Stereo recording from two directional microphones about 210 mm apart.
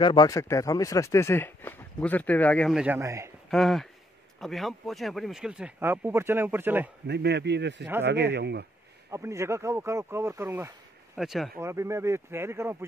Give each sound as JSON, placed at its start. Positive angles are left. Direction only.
{"t": 0.0, "sound": "speech", "side_deg": 20}
{"t": 3.4, "sound": "speech", "side_deg": 0}
{"t": 7.1, "sound": "a man's voice", "side_deg": -50}
{"t": 9.1, "sound": "speech", "side_deg": -15}
{"t": 11.1, "sound": "speech", "side_deg": 0}
{"t": 11.6, "sound": "speech", "side_deg": -15}